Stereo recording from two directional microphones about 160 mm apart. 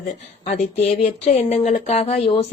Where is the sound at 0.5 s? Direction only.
40° left (ahead or behind).